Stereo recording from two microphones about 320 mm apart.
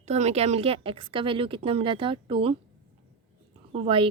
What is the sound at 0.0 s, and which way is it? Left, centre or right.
A woman's voice, right.